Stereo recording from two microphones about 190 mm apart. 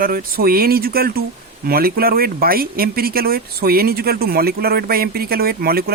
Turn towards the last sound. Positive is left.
turn(degrees=-55)  # may be behind; listen again after turning